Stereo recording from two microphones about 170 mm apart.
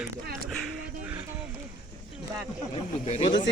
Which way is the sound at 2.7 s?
35° left (ahead or behind).